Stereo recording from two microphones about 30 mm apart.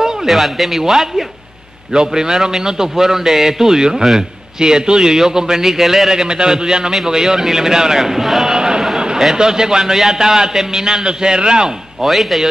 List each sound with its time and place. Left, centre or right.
0.3 s a man's voice: centre
2.0 s a man's voice: right
6.2 s a man's voice: right; by 8.5 s centre
8.5 s a sound: right
9.4 s a man's voice: right
11.1 s a man's voice: right
12.0 s speech: centre